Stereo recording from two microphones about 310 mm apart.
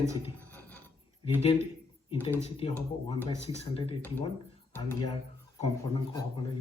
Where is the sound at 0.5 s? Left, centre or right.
Centre.